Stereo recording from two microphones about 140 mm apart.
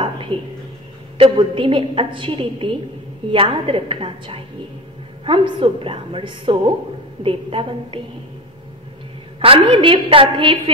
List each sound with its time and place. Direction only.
0.0 s a sound: 40° right (ahead or behind)
1.1 s a woman's voice: 40° right (ahead or behind)
9.4 s a woman's voice: 40° right (ahead or behind)